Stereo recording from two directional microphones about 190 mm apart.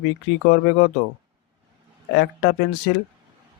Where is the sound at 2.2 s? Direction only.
65° left (ahead or behind).